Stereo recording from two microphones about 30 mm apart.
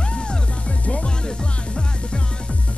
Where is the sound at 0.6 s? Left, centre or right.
Left.